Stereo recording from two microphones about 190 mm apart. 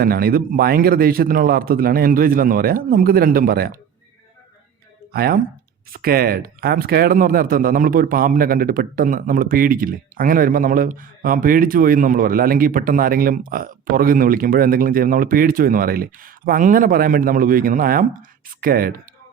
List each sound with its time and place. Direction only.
0.0 s speech: 50° right (ahead or behind)
5.1 s speech: 55° right (ahead or behind)